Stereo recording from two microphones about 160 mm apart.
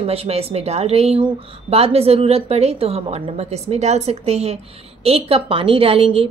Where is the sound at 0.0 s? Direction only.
40° right (ahead or behind).